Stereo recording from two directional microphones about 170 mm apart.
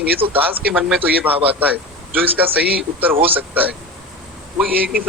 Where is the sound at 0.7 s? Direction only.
5° right (ahead or behind).